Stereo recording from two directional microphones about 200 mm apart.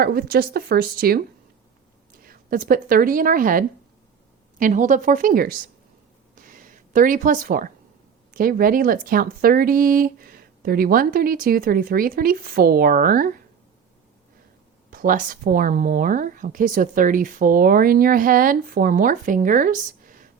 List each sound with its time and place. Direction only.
0.0 s speech: 50° right (ahead or behind)
2.2 s a woman's voice: 45° right (ahead or behind)
6.3 s a sound: 40° right (ahead or behind)
8.3 s speech: 45° right (ahead or behind)
14.8 s speech: 45° right (ahead or behind)